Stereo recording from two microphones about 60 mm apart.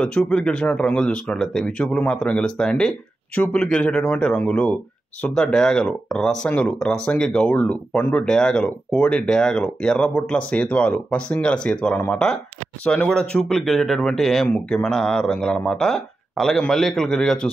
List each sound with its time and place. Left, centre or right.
0.0 s speech: centre
1.8 s speech: centre
3.4 s speech: left
3.7 s speech: centre
5.3 s speech: centre
8.3 s speech: centre
12.8 s speech: centre